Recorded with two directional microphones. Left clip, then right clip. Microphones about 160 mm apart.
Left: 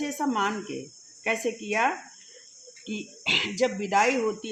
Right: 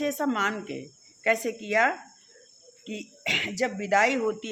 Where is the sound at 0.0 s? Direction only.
25° right (ahead or behind).